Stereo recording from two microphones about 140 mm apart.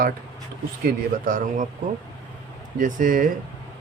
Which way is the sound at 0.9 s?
80° right.